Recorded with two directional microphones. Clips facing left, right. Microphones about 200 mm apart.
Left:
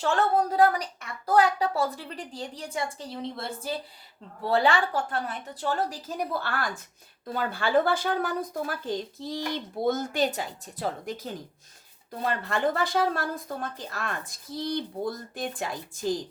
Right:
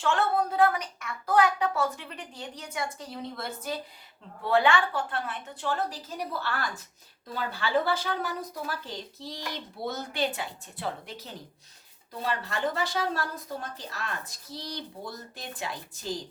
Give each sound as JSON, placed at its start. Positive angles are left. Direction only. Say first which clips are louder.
{"t": 0.0, "sound": "a woman's voice", "louder": "left 2 dB", "side_deg": 40}